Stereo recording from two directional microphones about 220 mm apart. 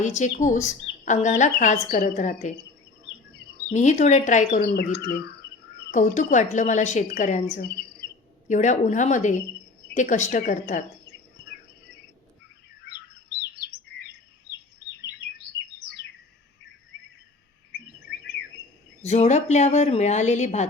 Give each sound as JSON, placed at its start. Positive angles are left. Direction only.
{"t": 0.0, "sound": "a woman's voice", "side_deg": 35}
{"t": 3.7, "sound": "a woman's voice", "side_deg": 35}
{"t": 4.6, "sound": "a woman's voice", "side_deg": 45}
{"t": 8.4, "sound": "a woman's voice", "side_deg": 35}
{"t": 13.7, "sound": "chirp", "side_deg": 45}
{"t": 19.0, "sound": "a woman's voice", "side_deg": 30}